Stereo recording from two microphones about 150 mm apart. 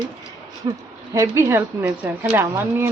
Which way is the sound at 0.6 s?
25° right (ahead or behind).